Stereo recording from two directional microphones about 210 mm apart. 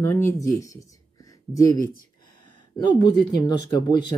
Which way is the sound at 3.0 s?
20° left (ahead or behind).